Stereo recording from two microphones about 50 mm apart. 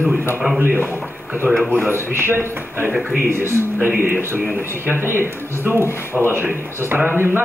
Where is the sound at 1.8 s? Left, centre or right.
Right.